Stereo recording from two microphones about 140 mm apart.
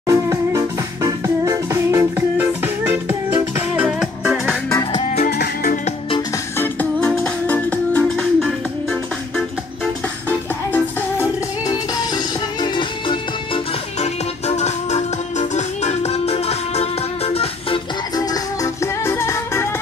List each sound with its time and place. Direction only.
0.0 s music: 20° right (ahead or behind); by 4.6 s 5° right (ahead or behind)
4.6 s music: 25° left (ahead or behind)
5.2 s music: 90° left
6.3 s music: 15° left (ahead or behind)
10.2 s music: 15° left (ahead or behind)
11.6 s music: 30° left (ahead or behind)
13.9 s music: 50° left (ahead or behind)
18.1 s music: 25° left (ahead or behind)